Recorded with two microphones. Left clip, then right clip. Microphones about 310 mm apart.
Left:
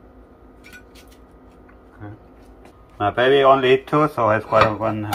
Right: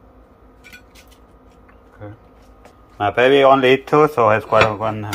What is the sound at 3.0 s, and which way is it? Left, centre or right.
Speech, right.